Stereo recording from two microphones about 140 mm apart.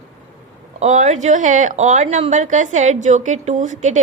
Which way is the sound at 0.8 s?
60° right (ahead or behind).